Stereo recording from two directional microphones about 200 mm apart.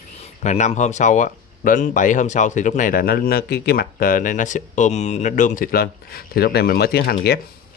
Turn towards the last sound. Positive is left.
turn(degrees=55)  # may be behind; listen again after turning